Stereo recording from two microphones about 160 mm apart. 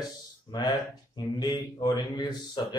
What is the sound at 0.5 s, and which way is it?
Speech, 25° left (ahead or behind).